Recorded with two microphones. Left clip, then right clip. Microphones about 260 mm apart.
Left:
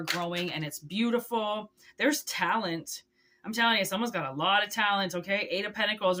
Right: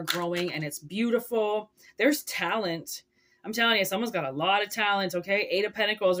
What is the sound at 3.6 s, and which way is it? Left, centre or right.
Speech, centre.